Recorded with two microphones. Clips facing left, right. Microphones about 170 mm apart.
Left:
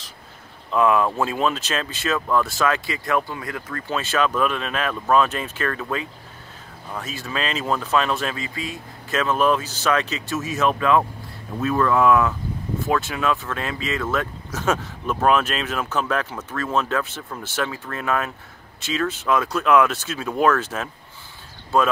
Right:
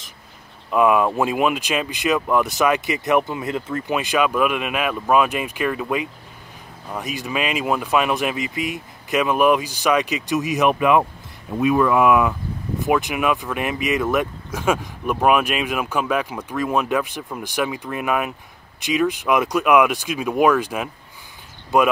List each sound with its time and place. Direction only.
0.7 s speech: 15° right (ahead or behind)